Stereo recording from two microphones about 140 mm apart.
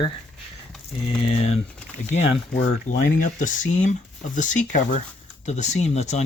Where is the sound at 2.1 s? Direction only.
55° left (ahead or behind).